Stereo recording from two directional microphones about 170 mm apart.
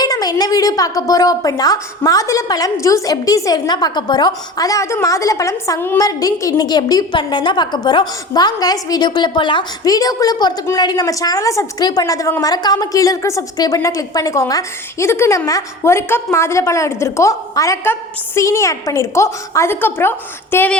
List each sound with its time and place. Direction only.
0.0 s a woman's voice: 20° left (ahead or behind)